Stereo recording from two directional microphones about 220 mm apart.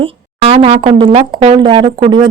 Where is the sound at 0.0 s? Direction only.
25° right (ahead or behind).